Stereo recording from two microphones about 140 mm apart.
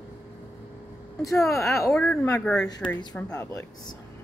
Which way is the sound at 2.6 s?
30° left (ahead or behind).